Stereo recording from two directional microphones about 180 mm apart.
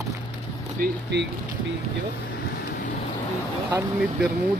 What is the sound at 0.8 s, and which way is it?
Speech, 70° right (ahead or behind).